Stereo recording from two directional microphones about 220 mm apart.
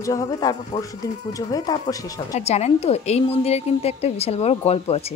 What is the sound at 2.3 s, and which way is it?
Speech, 30° left (ahead or behind).